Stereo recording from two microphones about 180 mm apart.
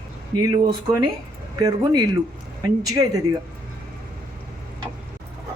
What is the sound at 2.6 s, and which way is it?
Speech, 20° right (ahead or behind).